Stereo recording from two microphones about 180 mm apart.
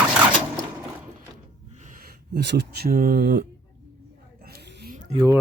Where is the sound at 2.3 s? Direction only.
65° right (ahead or behind).